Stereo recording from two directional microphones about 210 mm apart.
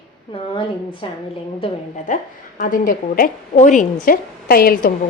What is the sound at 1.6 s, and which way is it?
A woman's voice, 35° left (ahead or behind).